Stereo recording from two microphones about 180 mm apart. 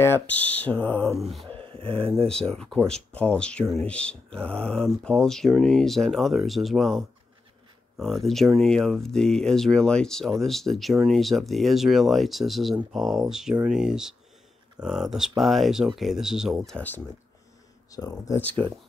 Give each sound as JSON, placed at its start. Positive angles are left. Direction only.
{"t": 0.0, "sound": "speech", "side_deg": 10}
{"t": 1.7, "sound": "speech", "side_deg": -30}
{"t": 2.2, "sound": "speech", "side_deg": 5}
{"t": 16.6, "sound": "speech", "side_deg": 10}
{"t": 17.9, "sound": "speech", "side_deg": 20}